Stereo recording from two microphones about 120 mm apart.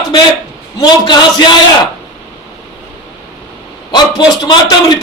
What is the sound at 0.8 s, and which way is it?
Speech, 40° left (ahead or behind).